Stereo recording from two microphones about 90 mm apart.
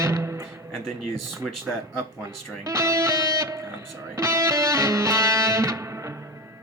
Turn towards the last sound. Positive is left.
turn(degrees=-35)  # may be behind; listen again after turning